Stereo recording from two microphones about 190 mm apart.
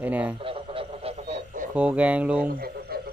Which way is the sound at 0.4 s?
25° right (ahead or behind).